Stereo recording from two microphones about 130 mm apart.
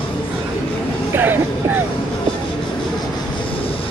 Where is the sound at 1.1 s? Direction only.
15° right (ahead or behind).